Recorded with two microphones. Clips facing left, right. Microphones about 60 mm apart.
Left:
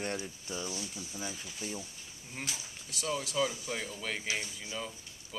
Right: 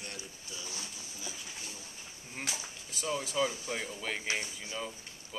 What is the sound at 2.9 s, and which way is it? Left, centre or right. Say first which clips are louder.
Speech: even; centre.